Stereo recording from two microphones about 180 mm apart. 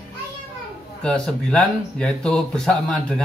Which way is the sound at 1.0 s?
5° left (ahead or behind).